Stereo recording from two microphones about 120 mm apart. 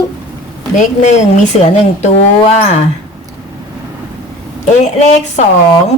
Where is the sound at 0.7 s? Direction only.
75° left (ahead or behind).